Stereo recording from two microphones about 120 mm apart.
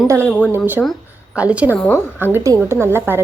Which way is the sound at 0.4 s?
15° right (ahead or behind).